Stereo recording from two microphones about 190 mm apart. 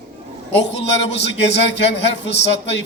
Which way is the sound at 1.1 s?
65° left (ahead or behind).